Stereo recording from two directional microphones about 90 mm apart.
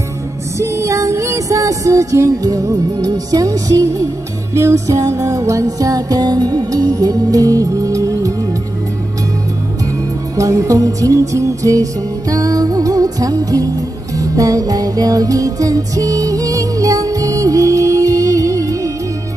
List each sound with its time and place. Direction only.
0.6 s music: 35° right (ahead or behind)
10.3 s music: 35° right (ahead or behind)